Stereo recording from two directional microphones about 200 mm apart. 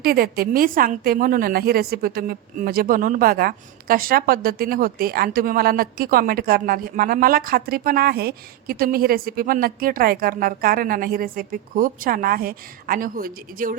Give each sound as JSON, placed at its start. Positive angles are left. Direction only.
{"t": 0.0, "sound": "a woman's voice", "side_deg": -50}